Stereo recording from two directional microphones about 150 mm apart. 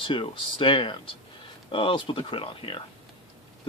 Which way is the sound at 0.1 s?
35° left (ahead or behind).